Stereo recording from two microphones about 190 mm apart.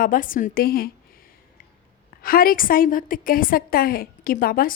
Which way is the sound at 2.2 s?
50° left (ahead or behind).